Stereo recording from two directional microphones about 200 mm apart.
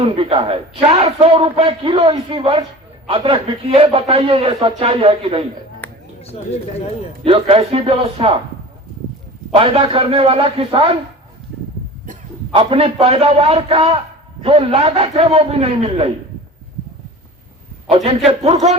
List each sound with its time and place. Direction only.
0.0 s a man's voice: 30° right (ahead or behind)
6.2 s speech: 30° left (ahead or behind)
7.3 s a man's voice: 30° right (ahead or behind)
9.6 s a man's voice: 25° right (ahead or behind)
12.0 s a man's voice: 30° right (ahead or behind)
17.8 s a man's voice: 25° right (ahead or behind)